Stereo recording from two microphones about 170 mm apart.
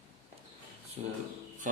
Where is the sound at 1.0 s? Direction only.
35° right (ahead or behind).